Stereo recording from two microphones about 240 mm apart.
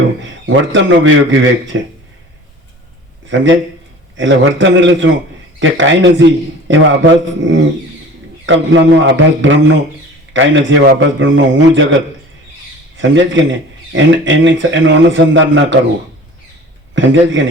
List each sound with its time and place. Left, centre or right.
0.2 s a man's voice: right
3.2 s a man's voice: right
16.9 s a man's voice: right